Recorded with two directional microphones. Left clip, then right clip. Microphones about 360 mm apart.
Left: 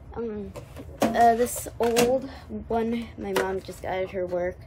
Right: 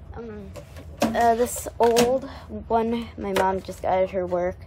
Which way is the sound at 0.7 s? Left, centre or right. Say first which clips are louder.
Left 1 dB; centre.